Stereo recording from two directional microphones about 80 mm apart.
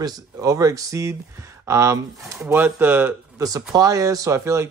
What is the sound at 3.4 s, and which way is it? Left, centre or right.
Speech, right.